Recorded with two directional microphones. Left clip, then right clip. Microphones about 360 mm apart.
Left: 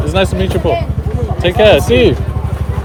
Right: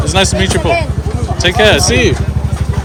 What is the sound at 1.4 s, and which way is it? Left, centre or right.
Speech, centre.